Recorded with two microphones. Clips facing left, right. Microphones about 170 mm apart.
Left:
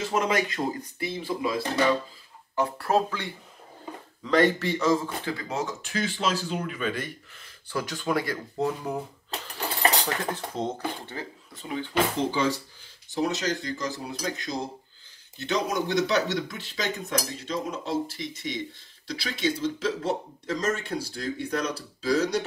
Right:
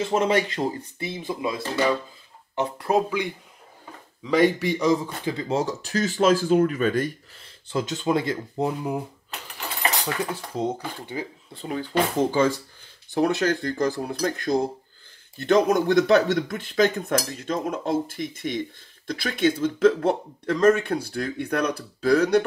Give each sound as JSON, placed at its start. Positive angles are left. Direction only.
{"t": 0.2, "sound": "speech", "side_deg": -30}
{"t": 5.4, "sound": "speech", "side_deg": -30}
{"t": 10.3, "sound": "speech", "side_deg": -10}
{"t": 11.5, "sound": "speech", "side_deg": -40}